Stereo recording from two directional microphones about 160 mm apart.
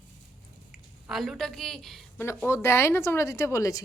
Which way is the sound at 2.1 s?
15° left (ahead or behind).